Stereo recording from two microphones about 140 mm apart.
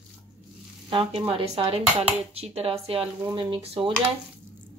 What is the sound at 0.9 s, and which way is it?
Speech, 40° right (ahead or behind).